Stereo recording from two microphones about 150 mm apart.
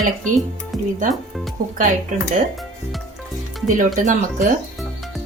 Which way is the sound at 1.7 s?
60° right (ahead or behind).